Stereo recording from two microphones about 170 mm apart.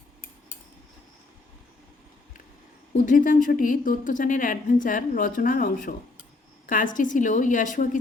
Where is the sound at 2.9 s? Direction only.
50° left (ahead or behind).